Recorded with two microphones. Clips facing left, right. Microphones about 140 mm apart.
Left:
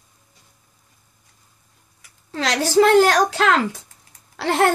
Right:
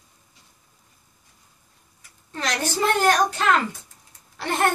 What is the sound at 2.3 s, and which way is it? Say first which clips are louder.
A child's voice: left 5 dB; 90° left.